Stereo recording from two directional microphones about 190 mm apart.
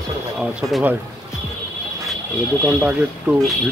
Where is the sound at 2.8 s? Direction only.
10° right (ahead or behind).